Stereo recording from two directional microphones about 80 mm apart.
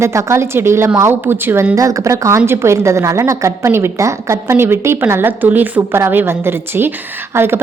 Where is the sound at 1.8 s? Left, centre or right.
Right.